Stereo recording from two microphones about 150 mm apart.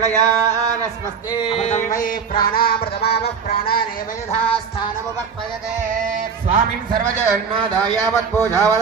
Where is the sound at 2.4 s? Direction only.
85° left.